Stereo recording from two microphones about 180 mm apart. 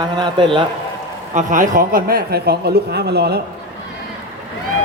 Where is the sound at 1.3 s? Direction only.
45° right (ahead or behind); by 3.4 s 65° right (ahead or behind).